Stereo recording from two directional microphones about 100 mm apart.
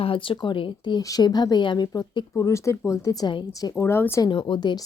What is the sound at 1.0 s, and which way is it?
Speech, 40° left (ahead or behind).